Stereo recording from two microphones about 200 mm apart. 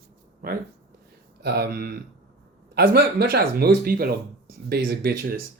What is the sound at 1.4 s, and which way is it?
Speech, 55° right (ahead or behind).